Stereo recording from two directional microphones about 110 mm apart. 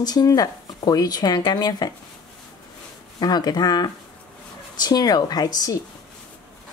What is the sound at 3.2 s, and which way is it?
Speech, 40° left (ahead or behind).